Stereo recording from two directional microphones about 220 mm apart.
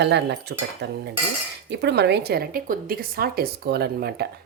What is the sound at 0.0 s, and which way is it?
Speech, 50° right (ahead or behind).